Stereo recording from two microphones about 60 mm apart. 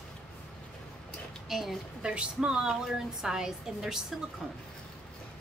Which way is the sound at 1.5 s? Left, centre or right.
Centre.